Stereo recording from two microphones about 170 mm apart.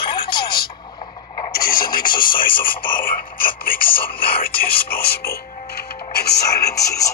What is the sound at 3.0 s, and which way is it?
Speech, 55° left (ahead or behind).